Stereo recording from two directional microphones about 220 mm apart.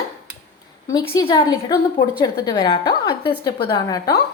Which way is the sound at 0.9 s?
15° left (ahead or behind).